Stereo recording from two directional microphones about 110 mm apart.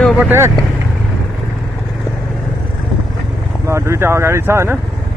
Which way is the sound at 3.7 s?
25° right (ahead or behind).